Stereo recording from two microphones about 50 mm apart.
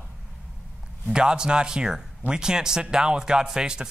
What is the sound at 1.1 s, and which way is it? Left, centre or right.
Speech, centre.